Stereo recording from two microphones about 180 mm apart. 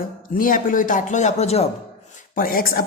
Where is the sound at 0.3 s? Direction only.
50° left (ahead or behind).